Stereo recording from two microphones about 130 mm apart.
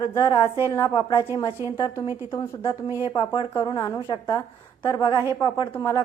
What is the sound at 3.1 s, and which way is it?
A woman's voice, 35° left (ahead or behind).